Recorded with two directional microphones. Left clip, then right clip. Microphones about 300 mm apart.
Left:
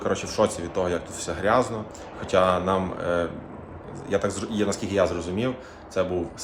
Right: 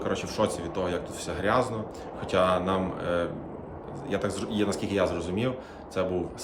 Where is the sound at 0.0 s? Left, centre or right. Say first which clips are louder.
Left 4 dB; centre.